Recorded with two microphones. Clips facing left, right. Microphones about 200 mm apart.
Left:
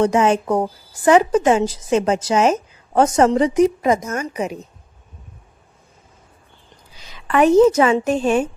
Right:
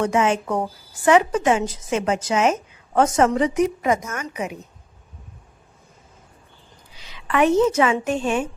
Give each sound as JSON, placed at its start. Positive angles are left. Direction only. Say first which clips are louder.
{"t": 0.0, "sound": "a woman's voice", "louder": "left 4 dB", "side_deg": 35}
{"t": 7.0, "sound": "a woman's voice", "louder": "left 3 dB", "side_deg": 40}